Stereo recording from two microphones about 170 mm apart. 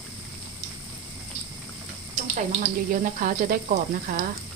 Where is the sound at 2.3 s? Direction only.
50° right (ahead or behind).